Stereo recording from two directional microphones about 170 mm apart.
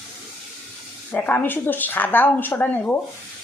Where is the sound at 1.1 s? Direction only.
10° left (ahead or behind).